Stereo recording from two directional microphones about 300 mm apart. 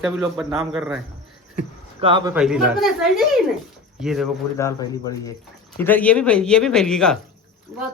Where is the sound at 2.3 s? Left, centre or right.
Centre.